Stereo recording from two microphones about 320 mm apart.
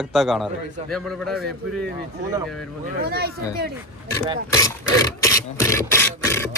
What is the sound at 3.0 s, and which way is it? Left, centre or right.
Speech, right.